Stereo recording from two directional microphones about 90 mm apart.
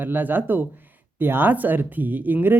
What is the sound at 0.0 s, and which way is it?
Speech, 20° right (ahead or behind).